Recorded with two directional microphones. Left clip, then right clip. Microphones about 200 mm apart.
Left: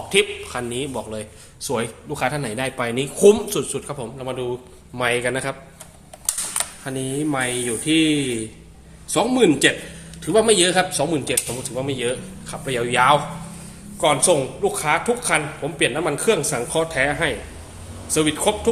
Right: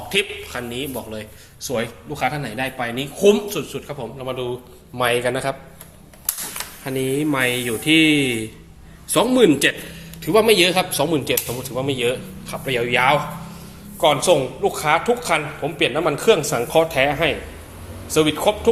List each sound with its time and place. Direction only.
0.1 s a man's voice: 15° left (ahead or behind)
4.3 s a man's voice: 15° left (ahead or behind)
6.8 s a man's voice: 5° right (ahead or behind); by 13.2 s 15° left (ahead or behind)
14.0 s a man's voice: 5° left (ahead or behind)